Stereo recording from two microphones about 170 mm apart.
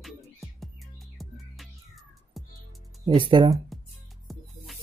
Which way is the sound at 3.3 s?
30° right (ahead or behind).